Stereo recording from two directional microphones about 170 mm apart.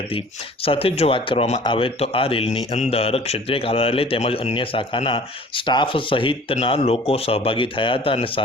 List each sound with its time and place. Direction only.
0.6 s a man's voice: 35° left (ahead or behind)